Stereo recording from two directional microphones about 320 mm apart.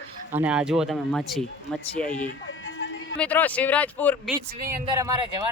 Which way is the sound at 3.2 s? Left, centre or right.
Centre.